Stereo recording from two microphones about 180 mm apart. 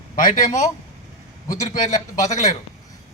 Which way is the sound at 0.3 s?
45° left (ahead or behind).